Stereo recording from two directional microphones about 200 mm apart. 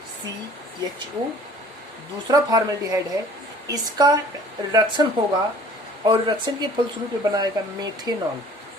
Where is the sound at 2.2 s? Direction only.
20° right (ahead or behind).